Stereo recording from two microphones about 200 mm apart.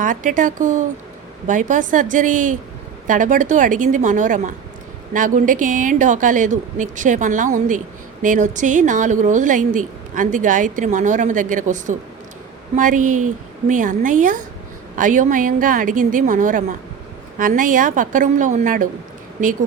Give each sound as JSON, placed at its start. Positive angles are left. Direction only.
{"t": 0.0, "sound": "a woman's voice", "side_deg": -40}